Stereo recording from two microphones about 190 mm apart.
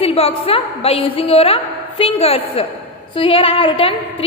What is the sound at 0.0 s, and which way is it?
A woman's voice, 30° left (ahead or behind).